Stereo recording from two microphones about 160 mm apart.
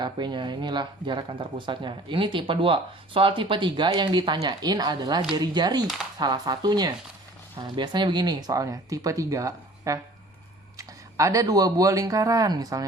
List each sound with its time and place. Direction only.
0.0 s speech: 30° right (ahead or behind)